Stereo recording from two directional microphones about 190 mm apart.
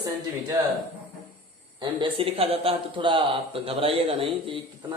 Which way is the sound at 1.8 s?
25° right (ahead or behind).